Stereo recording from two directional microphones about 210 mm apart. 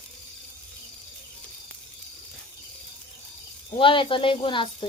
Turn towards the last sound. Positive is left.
turn(degrees=25)  # may be behind; listen again after turning